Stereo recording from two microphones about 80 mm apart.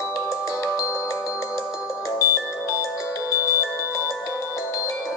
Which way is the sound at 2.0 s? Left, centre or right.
Left.